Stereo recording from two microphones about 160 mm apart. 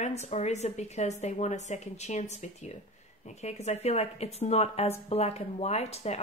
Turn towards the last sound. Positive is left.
turn(degrees=40)  # may be behind; listen again after turning